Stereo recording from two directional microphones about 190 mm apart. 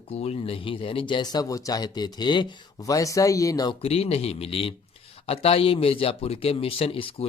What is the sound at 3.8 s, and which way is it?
Speech, 30° left (ahead or behind).